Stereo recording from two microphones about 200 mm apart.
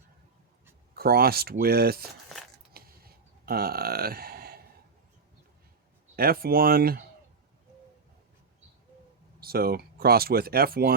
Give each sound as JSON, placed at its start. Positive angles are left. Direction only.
{"t": 0.9, "sound": "speech", "side_deg": -50}
{"t": 2.7, "sound": "a sound", "side_deg": -50}
{"t": 6.1, "sound": "speech", "side_deg": -50}
{"t": 9.4, "sound": "speech", "side_deg": -50}